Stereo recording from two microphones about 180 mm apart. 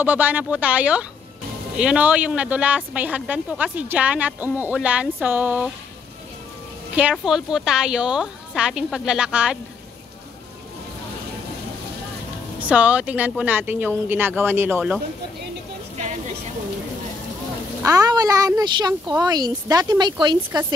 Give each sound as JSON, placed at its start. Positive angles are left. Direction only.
{"t": 0.0, "sound": "speech", "side_deg": -10}
{"t": 7.0, "sound": "a woman's voice", "side_deg": -5}
{"t": 12.5, "sound": "speech", "side_deg": -5}
{"t": 17.8, "sound": "speech", "side_deg": -20}